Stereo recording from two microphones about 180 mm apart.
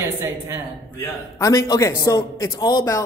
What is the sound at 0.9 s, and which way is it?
A man's voice, 15° left (ahead or behind).